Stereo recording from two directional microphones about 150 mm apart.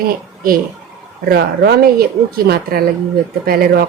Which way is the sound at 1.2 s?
90° right.